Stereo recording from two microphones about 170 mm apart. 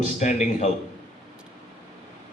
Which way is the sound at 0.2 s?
45° left (ahead or behind).